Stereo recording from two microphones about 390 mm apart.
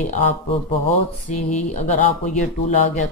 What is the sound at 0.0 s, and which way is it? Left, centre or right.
Speech, centre.